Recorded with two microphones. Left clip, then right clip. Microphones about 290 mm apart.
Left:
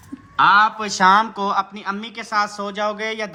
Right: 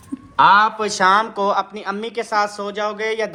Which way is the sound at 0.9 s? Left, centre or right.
Centre.